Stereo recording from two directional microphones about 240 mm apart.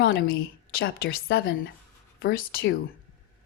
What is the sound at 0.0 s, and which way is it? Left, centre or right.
A woman's voice, left.